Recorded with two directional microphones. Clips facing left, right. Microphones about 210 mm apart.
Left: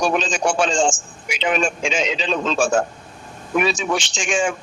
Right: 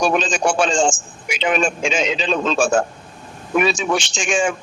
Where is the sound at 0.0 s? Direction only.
50° right (ahead or behind).